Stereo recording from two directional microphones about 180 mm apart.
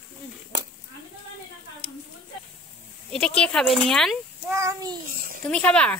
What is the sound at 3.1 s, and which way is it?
Speech, 5° left (ahead or behind).